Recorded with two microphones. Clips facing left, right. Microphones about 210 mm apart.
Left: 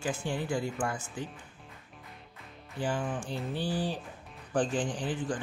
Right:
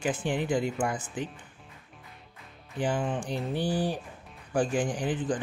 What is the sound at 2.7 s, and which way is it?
Speech, 15° right (ahead or behind).